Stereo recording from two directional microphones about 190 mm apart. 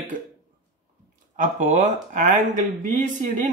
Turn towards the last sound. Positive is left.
turn(degrees=-40)  # may be behind; listen again after turning